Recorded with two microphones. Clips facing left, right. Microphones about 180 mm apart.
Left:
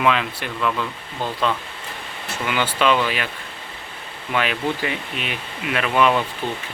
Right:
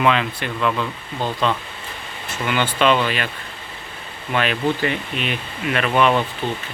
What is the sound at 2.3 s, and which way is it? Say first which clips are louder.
Speech: right 1 dB; 5° left (ahead or behind).